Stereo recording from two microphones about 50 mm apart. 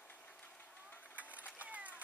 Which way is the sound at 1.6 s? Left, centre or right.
Right.